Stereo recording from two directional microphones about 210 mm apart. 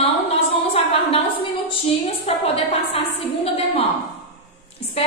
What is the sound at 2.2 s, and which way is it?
Speech, 30° left (ahead or behind).